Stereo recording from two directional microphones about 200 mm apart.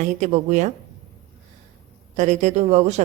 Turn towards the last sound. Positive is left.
turn(degrees=-35)  # may be behind; listen again after turning